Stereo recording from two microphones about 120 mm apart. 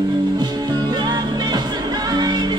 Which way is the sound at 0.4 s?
35° right (ahead or behind).